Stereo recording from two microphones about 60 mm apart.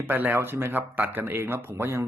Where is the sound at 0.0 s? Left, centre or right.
Right.